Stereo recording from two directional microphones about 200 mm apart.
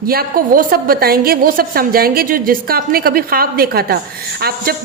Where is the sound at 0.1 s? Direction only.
45° right (ahead or behind).